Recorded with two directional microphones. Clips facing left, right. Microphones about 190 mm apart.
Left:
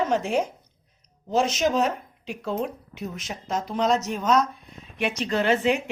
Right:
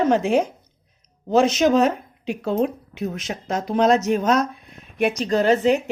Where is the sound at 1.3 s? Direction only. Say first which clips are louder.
Right 6 dB; 65° right (ahead or behind).